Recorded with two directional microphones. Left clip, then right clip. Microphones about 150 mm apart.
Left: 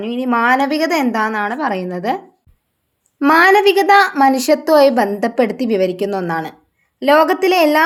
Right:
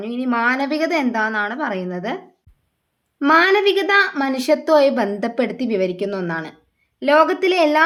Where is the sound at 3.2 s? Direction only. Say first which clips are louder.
Left 4 dB; 25° left (ahead or behind).